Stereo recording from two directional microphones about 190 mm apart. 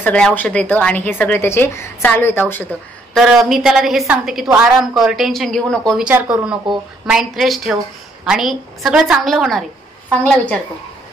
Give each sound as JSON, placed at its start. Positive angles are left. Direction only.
{"t": 0.0, "sound": "a woman's voice", "side_deg": 10}
{"t": 3.2, "sound": "speech", "side_deg": 0}